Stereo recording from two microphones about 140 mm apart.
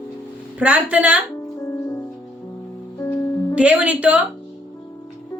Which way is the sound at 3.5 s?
10° right (ahead or behind).